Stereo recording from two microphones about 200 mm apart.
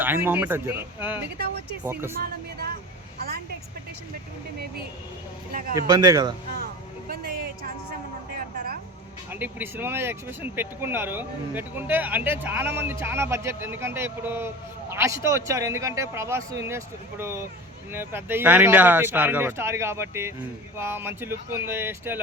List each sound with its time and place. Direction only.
0.0 s speech: 10° right (ahead or behind)
5.5 s speech: 45° right (ahead or behind)
5.9 s speech: 20° right (ahead or behind)
7.1 s vehicle: 50° right (ahead or behind)
8.4 s music: 50° right (ahead or behind)
9.3 s speech: 10° right (ahead or behind)